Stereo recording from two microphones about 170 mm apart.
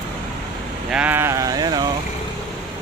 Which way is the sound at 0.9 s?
10° right (ahead or behind).